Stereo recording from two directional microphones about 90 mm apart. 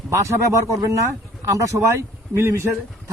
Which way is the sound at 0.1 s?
35° right (ahead or behind).